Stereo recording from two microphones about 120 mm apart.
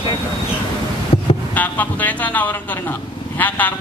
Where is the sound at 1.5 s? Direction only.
15° left (ahead or behind).